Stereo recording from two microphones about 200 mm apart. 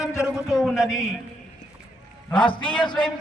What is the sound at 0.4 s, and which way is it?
Speech, centre (ahead or behind).